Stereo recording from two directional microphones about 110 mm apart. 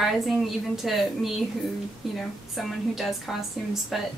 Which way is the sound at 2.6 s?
Centre (ahead or behind).